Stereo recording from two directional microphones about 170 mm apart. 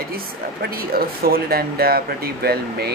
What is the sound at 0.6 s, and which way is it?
A woman's voice, 65° right (ahead or behind).